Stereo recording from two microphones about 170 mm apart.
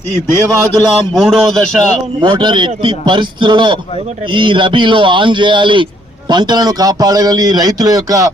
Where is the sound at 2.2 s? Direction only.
25° right (ahead or behind).